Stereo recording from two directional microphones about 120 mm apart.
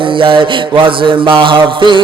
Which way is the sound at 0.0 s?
45° right (ahead or behind).